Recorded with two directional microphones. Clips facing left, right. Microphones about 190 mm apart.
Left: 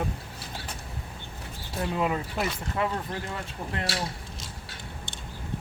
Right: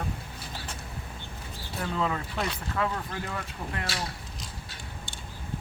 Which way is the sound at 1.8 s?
15° left (ahead or behind).